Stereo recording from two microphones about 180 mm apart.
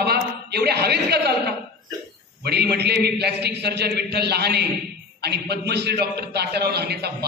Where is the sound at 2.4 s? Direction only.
65° right (ahead or behind).